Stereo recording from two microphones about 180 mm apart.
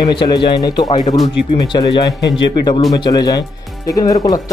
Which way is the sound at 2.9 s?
20° left (ahead or behind).